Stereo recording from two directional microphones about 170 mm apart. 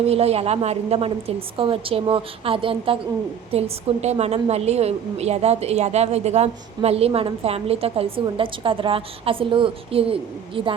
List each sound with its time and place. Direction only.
0.0 s a woman's voice: 35° right (ahead or behind)